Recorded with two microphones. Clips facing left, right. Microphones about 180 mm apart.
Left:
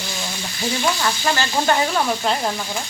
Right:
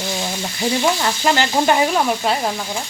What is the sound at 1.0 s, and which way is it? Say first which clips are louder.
Sizzle: right 3 dB; 20° right (ahead or behind).